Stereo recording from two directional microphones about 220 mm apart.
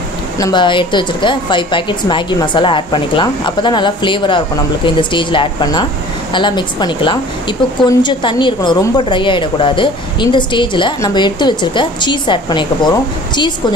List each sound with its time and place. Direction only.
0.4 s a woman's voice: 20° left (ahead or behind)